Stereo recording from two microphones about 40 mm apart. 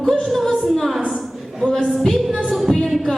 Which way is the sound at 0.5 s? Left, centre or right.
Centre.